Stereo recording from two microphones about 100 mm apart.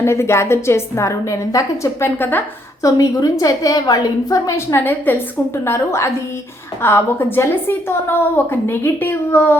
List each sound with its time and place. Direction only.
0.0 s a woman's voice: 25° left (ahead or behind)
2.8 s a woman's voice: 35° left (ahead or behind)
4.4 s a woman's voice: 25° left (ahead or behind)